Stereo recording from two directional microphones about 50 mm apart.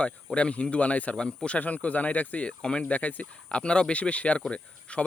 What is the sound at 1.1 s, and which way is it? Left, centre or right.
Speech, centre.